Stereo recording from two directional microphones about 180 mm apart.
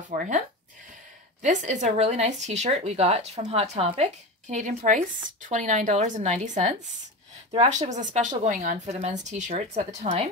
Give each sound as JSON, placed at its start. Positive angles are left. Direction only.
{"t": 0.1, "sound": "a woman's voice", "side_deg": -50}
{"t": 1.4, "sound": "a woman's voice", "side_deg": -45}